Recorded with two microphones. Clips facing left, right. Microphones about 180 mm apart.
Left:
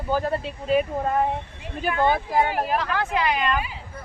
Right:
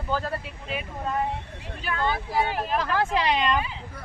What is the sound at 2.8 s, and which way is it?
Speech, 30° right (ahead or behind).